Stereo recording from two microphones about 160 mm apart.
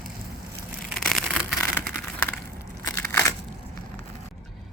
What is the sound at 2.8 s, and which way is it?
Crushing, 15° left (ahead or behind).